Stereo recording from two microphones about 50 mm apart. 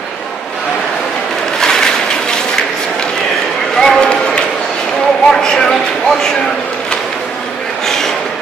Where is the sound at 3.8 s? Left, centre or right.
Centre.